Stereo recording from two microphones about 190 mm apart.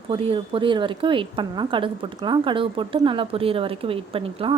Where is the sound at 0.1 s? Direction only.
25° right (ahead or behind).